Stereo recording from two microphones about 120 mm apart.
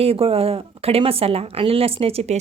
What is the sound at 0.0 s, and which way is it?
A woman's voice, 55° right (ahead or behind).